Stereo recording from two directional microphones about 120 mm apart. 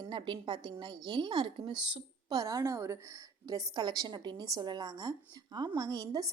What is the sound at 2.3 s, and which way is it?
A woman's voice, 30° right (ahead or behind).